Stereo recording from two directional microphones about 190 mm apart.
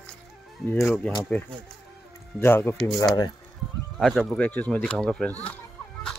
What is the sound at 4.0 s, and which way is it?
Speech, centre (ahead or behind).